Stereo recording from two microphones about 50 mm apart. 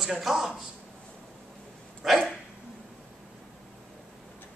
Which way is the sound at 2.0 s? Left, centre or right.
Centre.